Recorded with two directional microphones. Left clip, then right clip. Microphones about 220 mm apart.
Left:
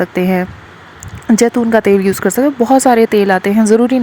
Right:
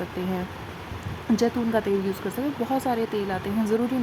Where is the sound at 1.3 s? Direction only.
40° left (ahead or behind).